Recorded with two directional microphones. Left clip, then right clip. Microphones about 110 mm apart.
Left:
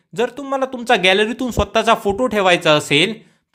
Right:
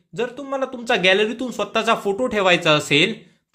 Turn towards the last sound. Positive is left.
turn(degrees=15)  # may be behind; listen again after turning